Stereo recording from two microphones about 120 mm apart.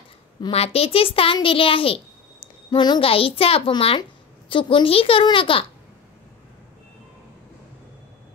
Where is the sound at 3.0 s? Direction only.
50° left (ahead or behind).